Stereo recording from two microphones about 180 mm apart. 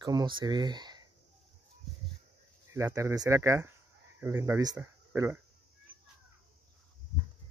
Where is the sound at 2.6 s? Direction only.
15° right (ahead or behind).